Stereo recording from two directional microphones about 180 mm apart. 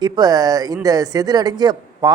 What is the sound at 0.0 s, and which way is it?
Speech, 20° right (ahead or behind).